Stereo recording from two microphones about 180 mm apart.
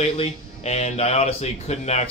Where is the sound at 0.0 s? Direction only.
35° left (ahead or behind).